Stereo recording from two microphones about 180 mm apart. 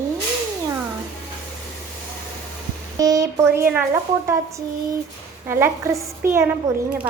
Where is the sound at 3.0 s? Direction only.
20° right (ahead or behind).